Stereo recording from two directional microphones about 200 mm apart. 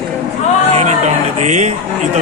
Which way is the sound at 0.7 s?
35° right (ahead or behind).